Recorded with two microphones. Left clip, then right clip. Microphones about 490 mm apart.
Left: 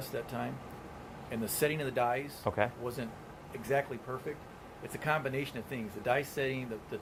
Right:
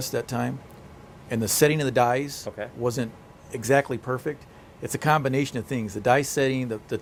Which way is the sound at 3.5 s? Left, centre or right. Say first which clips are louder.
Right 11 dB; right.